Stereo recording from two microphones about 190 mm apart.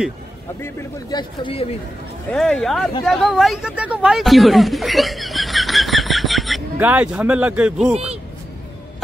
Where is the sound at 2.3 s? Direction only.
Centre (ahead or behind).